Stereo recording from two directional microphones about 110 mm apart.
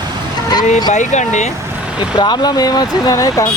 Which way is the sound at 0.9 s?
90° left.